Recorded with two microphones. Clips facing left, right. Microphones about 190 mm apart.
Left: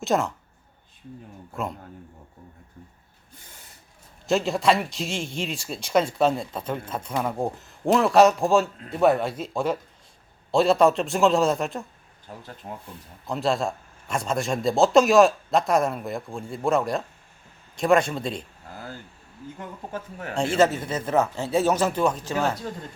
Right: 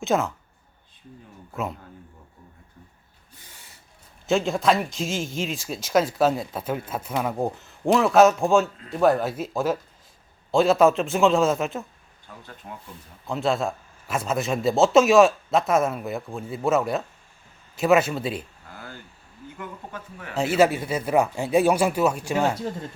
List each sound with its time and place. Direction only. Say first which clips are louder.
0.0 s speech: even; centre (ahead or behind)
4.3 s speech: even; centre (ahead or behind)
12.3 s speech: left 4 dB; 35° left (ahead or behind)
13.2 s speech: even; centre (ahead or behind)
19.5 s speech: left 2 dB; 40° left (ahead or behind)
20.3 s speech: right 1 dB; 5° right (ahead or behind)